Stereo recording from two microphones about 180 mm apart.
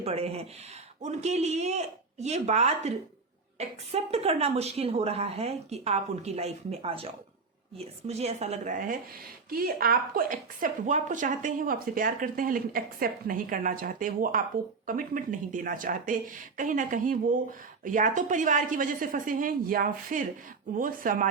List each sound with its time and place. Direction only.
0.0 s a woman's voice: 35° right (ahead or behind)